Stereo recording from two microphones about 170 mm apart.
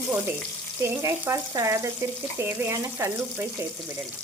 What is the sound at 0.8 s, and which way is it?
Speech, 15° right (ahead or behind).